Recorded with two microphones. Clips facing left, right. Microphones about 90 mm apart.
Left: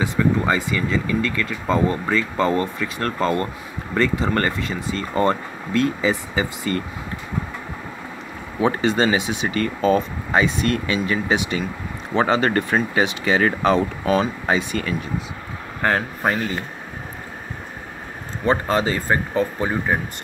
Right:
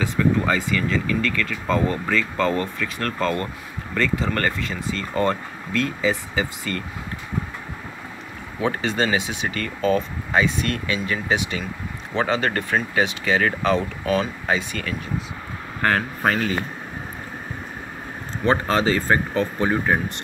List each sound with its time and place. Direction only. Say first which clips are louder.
0.5 s speech: left 1 dB; 20° left (ahead or behind)
8.6 s speech: left 4 dB; 15° left (ahead or behind)
10.3 s speech: left 2 dB; 15° left (ahead or behind)
18.4 s speech: even; 10° left (ahead or behind)